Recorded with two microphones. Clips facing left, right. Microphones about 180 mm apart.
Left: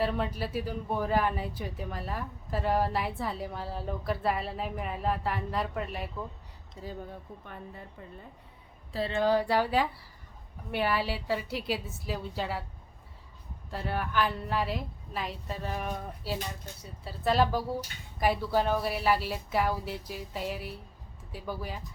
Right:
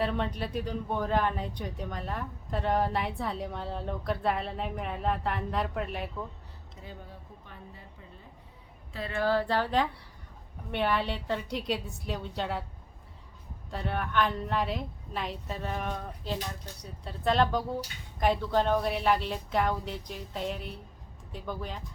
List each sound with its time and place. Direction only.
0.0 s speech: 5° left (ahead or behind)
7.1 s a woman's voice: 55° left (ahead or behind)
8.9 s speech: 30° left (ahead or behind)
9.1 s speech: 15° left (ahead or behind)
13.7 s speech: centre (ahead or behind)